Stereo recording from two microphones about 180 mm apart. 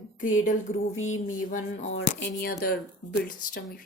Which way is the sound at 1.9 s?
70° left (ahead or behind).